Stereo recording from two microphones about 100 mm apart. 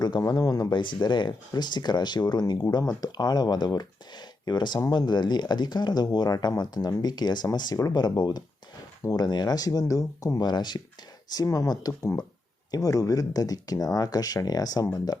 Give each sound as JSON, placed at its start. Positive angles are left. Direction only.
{"t": 0.0, "sound": "speech", "side_deg": 40}
{"t": 0.8, "sound": "speech", "side_deg": 50}
{"t": 10.3, "sound": "speech", "side_deg": 45}